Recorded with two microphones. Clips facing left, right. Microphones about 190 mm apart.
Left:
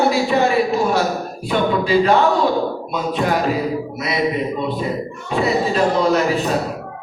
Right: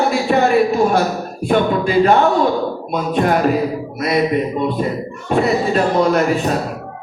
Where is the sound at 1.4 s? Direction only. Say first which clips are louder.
Right 3 dB; 50° right (ahead or behind).